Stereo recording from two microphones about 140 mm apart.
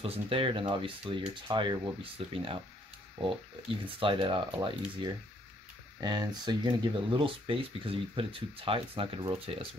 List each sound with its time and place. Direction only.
0.0 s speech: 40° right (ahead or behind)